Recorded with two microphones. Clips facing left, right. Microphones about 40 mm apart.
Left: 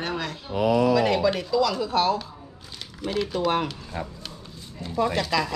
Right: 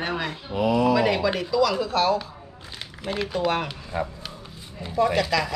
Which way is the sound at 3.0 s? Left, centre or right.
Centre.